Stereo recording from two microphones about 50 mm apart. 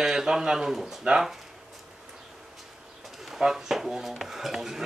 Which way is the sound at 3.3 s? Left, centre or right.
Centre.